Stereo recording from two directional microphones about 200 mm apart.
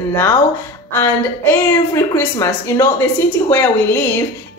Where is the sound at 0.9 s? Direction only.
15° left (ahead or behind).